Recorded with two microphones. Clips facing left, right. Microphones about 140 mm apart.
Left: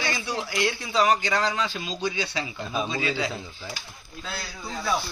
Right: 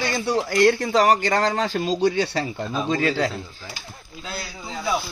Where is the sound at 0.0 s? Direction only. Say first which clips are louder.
Right 7 dB; 45° right (ahead or behind).